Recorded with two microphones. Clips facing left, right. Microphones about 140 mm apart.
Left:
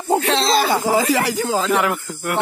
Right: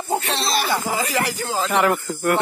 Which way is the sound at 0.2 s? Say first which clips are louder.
Left 6 dB; 90° left.